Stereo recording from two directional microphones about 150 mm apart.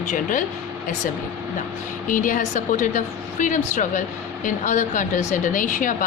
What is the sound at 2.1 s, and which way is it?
Speech, 60° left (ahead or behind).